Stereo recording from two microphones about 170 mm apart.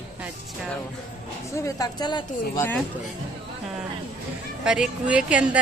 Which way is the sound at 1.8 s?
25° left (ahead or behind).